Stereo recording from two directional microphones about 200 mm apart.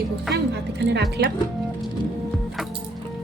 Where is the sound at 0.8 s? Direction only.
60° right (ahead or behind).